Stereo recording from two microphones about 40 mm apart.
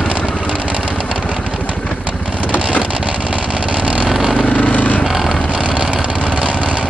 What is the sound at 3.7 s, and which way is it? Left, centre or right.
Vehicle, right.